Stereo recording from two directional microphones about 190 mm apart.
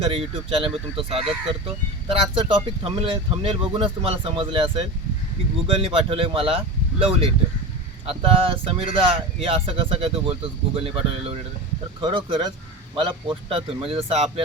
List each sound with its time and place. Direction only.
0.0 s speech: 30° right (ahead or behind)